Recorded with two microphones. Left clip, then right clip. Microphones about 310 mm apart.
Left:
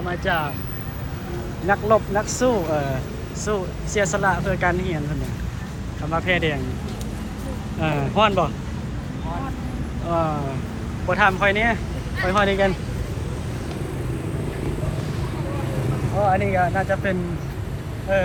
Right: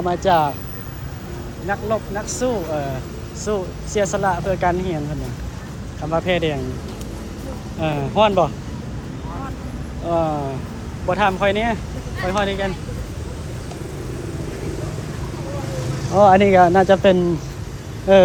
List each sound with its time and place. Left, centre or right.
0.1 s speech: centre
1.6 s speech: centre
6.1 s speech: centre
7.8 s speech: centre
10.1 s speech: centre
16.3 s speech: right